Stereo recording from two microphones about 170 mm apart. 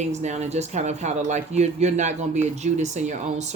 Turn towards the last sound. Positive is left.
turn(degrees=-45)  # may be behind; listen again after turning